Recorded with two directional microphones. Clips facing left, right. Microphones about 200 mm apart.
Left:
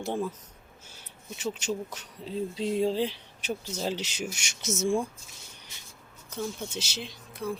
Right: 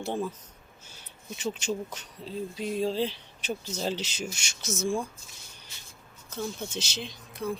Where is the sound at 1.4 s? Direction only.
5° left (ahead or behind).